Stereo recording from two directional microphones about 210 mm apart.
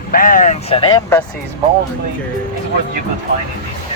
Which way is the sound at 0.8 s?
15° left (ahead or behind).